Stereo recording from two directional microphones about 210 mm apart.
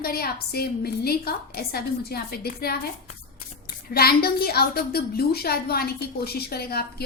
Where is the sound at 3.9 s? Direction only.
45° left (ahead or behind).